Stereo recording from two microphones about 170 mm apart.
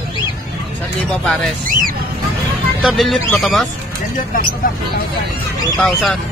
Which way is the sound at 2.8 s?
Centre (ahead or behind).